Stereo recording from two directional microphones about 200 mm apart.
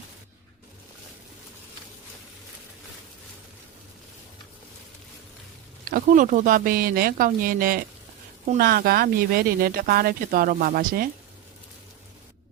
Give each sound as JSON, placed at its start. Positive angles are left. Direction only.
{"t": 5.9, "sound": "speech", "side_deg": -40}